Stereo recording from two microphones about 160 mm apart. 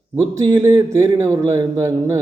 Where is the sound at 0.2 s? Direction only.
25° right (ahead or behind).